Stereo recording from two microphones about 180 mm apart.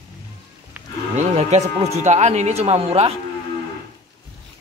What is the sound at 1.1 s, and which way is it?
Speech, 40° right (ahead or behind).